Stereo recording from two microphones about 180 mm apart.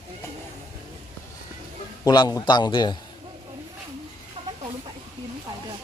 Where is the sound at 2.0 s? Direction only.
20° left (ahead or behind).